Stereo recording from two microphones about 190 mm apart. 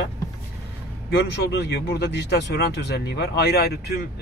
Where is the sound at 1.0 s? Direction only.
60° left (ahead or behind).